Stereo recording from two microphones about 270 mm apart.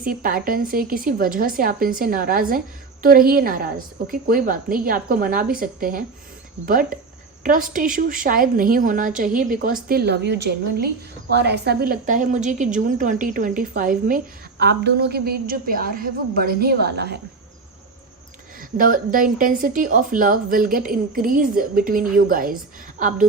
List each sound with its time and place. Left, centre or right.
0.0 s a woman's voice: right
18.8 s a woman's voice: right